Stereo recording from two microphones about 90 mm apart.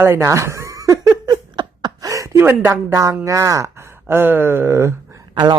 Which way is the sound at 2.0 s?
35° right (ahead or behind).